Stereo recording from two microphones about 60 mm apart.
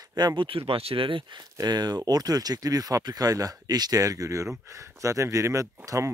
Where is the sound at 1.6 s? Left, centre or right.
Right.